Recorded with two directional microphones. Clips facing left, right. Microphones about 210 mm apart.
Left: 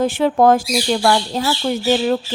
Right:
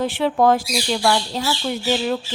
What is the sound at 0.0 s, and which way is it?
A woman's voice, 45° left (ahead or behind).